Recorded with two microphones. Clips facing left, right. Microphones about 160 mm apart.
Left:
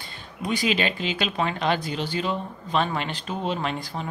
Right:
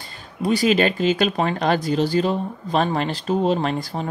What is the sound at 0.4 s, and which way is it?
Speech, 35° right (ahead or behind).